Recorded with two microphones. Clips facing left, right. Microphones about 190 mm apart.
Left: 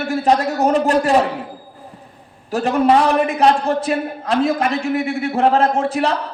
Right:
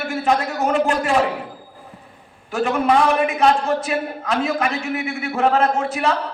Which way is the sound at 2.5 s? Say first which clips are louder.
Left 3 dB; 35° left (ahead or behind).